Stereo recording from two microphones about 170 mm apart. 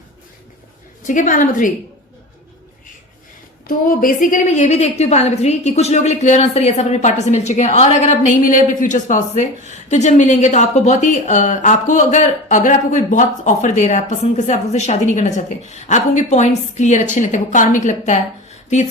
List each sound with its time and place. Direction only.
1.0 s speech: 50° left (ahead or behind)
3.7 s speech: 55° left (ahead or behind)